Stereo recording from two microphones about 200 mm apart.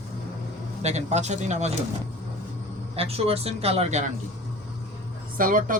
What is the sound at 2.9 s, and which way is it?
Speech, 30° right (ahead or behind).